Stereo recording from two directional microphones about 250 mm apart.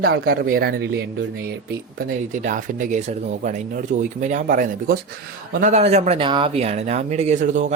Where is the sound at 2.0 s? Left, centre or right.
Right.